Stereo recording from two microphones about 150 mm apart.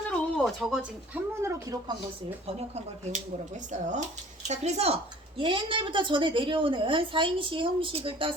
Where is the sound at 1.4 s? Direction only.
20° right (ahead or behind).